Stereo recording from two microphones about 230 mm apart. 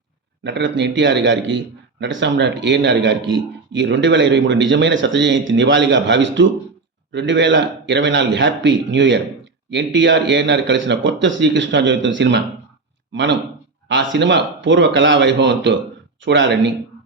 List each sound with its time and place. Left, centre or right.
0.4 s speech: right